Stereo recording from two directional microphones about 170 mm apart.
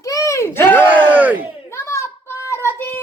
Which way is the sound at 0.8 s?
10° right (ahead or behind).